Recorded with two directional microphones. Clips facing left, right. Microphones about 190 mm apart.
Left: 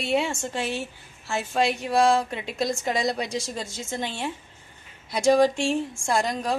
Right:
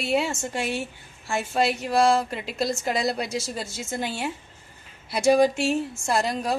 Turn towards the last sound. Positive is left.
turn(degrees=-5)  # may be behind; listen again after turning